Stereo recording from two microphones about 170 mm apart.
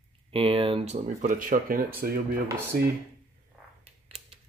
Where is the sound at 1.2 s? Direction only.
55° right (ahead or behind).